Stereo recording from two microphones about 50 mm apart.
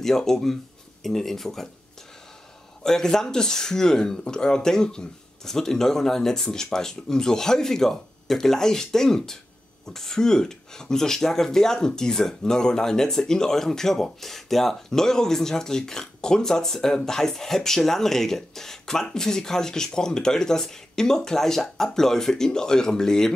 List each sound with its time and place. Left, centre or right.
0.0 s speech: centre
2.8 s speech: centre